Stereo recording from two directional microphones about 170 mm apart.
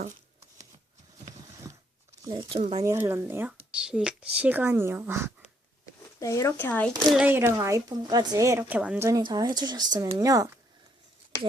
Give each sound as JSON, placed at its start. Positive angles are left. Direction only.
{"t": 2.2, "sound": "speech", "side_deg": -25}
{"t": 2.8, "sound": "speech", "side_deg": -15}
{"t": 6.1, "sound": "speech", "side_deg": 20}
{"t": 7.1, "sound": "speech", "side_deg": -10}
{"t": 9.0, "sound": "speech", "side_deg": -20}